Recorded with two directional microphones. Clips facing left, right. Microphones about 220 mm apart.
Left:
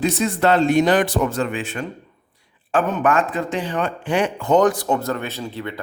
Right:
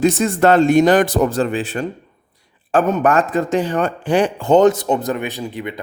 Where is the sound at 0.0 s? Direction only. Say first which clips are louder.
Right 5 dB; 50° right (ahead or behind).